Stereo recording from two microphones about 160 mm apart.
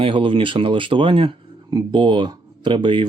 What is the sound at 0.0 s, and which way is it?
Speech, 30° right (ahead or behind).